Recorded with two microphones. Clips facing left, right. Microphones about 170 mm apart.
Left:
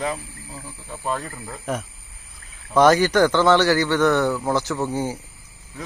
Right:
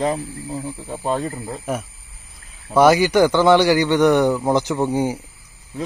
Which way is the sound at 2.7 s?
10° right (ahead or behind).